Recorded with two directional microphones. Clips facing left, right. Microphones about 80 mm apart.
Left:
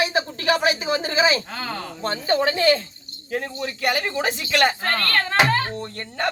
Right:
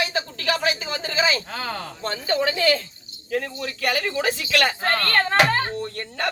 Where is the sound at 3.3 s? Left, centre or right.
Centre.